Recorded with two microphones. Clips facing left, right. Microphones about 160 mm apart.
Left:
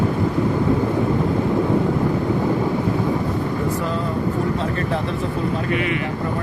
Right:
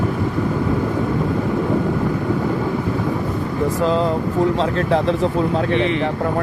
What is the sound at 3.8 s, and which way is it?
Speech, 90° right.